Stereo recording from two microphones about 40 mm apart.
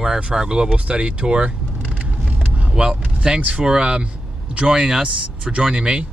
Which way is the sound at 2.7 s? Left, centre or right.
Right.